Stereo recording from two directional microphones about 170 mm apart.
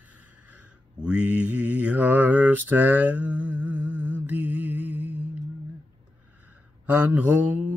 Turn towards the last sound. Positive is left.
turn(degrees=-10)  # may be behind; listen again after turning